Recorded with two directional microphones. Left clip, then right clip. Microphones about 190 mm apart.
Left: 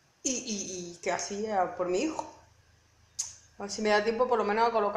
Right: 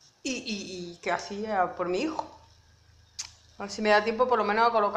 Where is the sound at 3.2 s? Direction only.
5° right (ahead or behind).